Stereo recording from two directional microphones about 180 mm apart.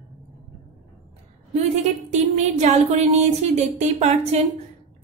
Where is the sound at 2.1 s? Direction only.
40° right (ahead or behind).